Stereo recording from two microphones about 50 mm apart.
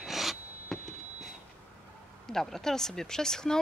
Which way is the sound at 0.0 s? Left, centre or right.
Centre.